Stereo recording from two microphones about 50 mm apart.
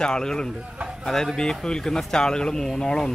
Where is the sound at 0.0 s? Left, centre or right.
Centre.